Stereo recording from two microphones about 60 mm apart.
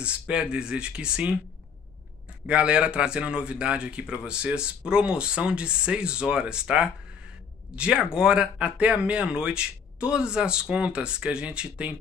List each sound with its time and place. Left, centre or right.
0.0 s a man's voice: centre
2.4 s a man's voice: centre